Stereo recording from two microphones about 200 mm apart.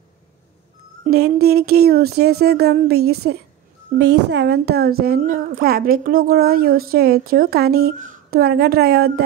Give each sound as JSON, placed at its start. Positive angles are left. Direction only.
{"t": 1.0, "sound": "a woman's voice", "side_deg": -50}